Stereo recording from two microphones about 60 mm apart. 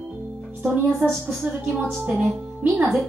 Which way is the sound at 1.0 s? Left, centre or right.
Centre.